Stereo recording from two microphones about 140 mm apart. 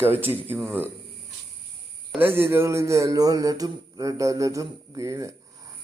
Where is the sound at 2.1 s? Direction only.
15° right (ahead or behind).